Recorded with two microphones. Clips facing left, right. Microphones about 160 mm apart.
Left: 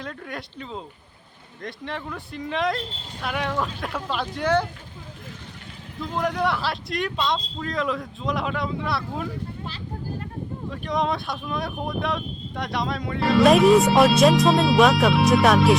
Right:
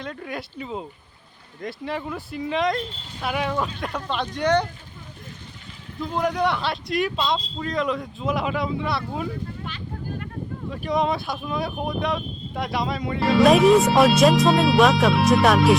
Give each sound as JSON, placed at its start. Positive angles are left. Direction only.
{"t": 0.0, "sound": "speech", "side_deg": 0}
{"t": 6.0, "sound": "speech", "side_deg": 0}
{"t": 9.6, "sound": "a sound", "side_deg": 35}
{"t": 10.7, "sound": "speech", "side_deg": 0}